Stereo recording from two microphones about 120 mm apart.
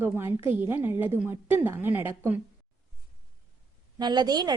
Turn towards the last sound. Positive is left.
turn(degrees=-35)  # may be behind; listen again after turning